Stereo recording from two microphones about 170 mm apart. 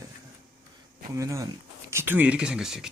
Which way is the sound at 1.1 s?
20° right (ahead or behind).